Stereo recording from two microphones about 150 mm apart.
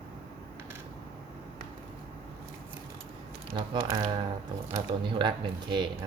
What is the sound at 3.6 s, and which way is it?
Speech, 35° right (ahead or behind).